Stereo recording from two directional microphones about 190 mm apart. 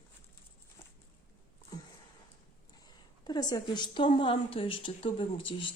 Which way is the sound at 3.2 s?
20° left (ahead or behind).